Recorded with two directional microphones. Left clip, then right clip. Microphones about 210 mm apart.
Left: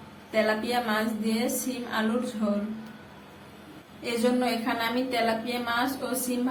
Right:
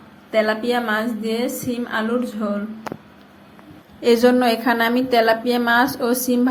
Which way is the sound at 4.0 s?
35° right (ahead or behind).